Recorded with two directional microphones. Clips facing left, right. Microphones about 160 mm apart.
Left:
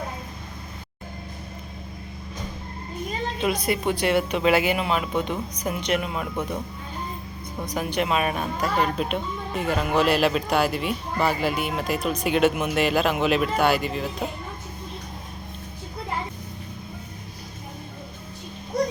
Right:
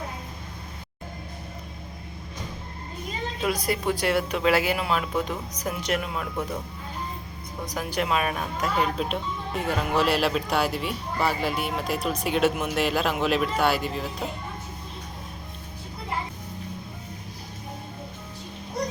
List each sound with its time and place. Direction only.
3.4 s speech: centre (ahead or behind)
7.6 s speech: centre (ahead or behind)